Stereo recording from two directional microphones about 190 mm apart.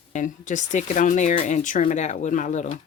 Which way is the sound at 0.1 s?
40° left (ahead or behind).